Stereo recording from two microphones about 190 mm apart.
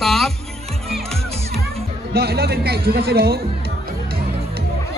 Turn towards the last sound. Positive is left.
turn(degrees=-55)  # may be behind; listen again after turning